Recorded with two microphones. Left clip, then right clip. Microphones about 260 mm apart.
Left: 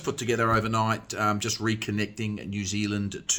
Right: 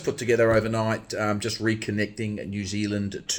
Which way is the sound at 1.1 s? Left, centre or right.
Left.